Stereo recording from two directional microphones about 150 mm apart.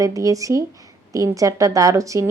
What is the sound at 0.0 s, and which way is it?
A woman's voice, 20° right (ahead or behind).